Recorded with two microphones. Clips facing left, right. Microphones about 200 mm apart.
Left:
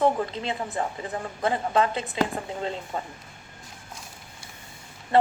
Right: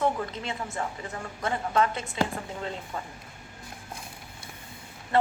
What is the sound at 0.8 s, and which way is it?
A woman's voice, 25° left (ahead or behind).